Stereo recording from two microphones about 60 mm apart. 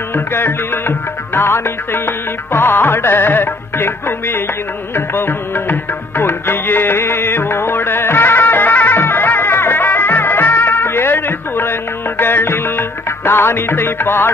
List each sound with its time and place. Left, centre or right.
0.1 s music: left